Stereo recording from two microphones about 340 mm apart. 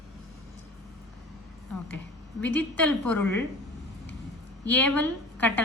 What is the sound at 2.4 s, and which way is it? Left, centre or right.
A woman's voice, centre.